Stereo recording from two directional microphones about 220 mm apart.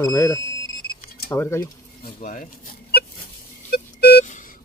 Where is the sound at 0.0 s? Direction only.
15° left (ahead or behind).